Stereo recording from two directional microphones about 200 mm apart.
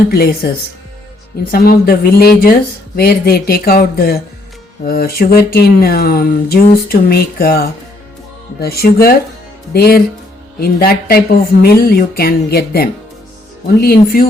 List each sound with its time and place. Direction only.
0.1 s speech: 50° left (ahead or behind)